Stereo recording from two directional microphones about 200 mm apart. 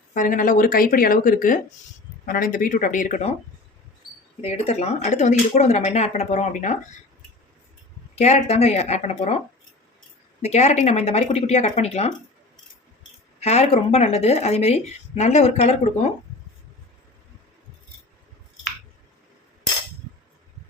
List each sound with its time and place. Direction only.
0.1 s speech: 40° left (ahead or behind)
4.4 s speech: 30° left (ahead or behind)
8.1 s speech: 35° left (ahead or behind)
10.4 s speech: 35° left (ahead or behind)
13.4 s speech: 35° left (ahead or behind)